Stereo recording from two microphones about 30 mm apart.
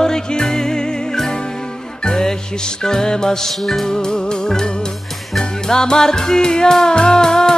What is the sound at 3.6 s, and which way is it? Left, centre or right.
Music, centre.